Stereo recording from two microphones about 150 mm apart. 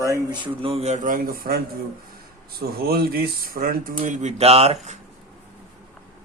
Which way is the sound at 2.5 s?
90° right.